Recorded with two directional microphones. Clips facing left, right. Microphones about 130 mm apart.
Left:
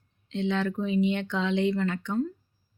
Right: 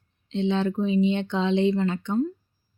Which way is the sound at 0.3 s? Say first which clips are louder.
Right 3 dB; 25° right (ahead or behind).